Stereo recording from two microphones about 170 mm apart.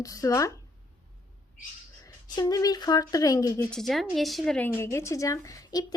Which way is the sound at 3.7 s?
Centre (ahead or behind).